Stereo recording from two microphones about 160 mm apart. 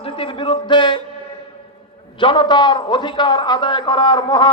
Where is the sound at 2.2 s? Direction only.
30° left (ahead or behind).